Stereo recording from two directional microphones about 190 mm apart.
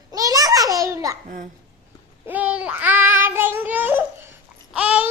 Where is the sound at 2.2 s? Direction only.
10° right (ahead or behind).